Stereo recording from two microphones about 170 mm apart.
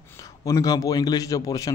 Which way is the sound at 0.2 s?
20° left (ahead or behind).